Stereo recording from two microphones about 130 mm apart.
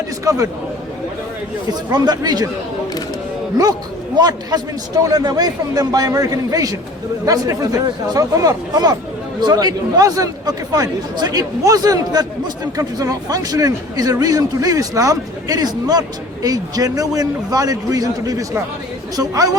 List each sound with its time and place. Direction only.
0.3 s a man's voice: 25° right (ahead or behind)
1.9 s a man's voice: 30° right (ahead or behind)
4.2 s a man's voice: 30° right (ahead or behind)